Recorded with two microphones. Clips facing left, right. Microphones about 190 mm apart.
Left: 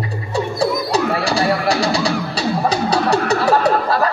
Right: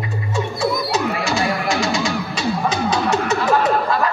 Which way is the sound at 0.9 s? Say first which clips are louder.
Left 3 dB; 35° left (ahead or behind).